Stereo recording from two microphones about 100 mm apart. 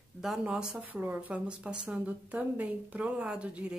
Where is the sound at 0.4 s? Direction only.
10° right (ahead or behind).